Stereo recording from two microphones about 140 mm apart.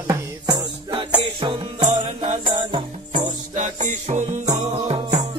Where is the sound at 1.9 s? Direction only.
55° right (ahead or behind).